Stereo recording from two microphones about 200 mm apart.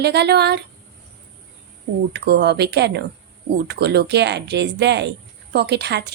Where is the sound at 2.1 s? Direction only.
55° right (ahead or behind).